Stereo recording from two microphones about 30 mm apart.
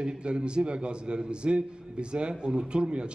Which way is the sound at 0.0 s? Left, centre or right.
Right.